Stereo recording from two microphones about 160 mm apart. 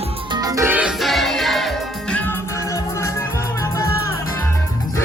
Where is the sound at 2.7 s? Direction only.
15° left (ahead or behind).